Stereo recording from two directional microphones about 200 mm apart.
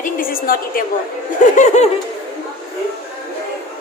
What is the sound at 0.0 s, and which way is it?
Speech, 45° left (ahead or behind).